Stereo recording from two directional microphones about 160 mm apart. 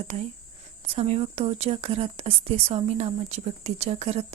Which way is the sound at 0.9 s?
40° right (ahead or behind).